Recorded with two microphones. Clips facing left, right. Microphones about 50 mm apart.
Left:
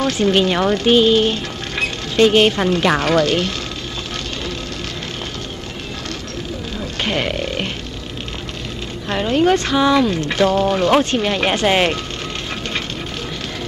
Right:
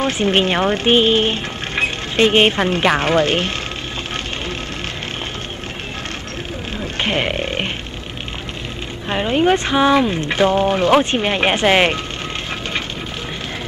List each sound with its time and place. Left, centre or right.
0.0 s speech: right
7.0 s speech: right
9.1 s speech: centre